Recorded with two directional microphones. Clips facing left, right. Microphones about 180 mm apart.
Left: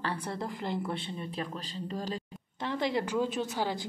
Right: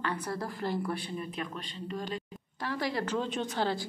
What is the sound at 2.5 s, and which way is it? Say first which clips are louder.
A woman's voice: left 2 dB; 20° left (ahead or behind).